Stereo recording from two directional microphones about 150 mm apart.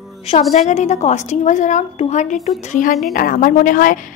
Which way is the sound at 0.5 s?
50° left (ahead or behind).